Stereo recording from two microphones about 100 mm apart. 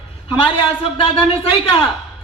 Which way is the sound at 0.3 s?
60° left (ahead or behind).